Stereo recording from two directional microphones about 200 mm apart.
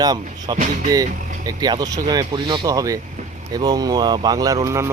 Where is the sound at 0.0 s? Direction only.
20° right (ahead or behind).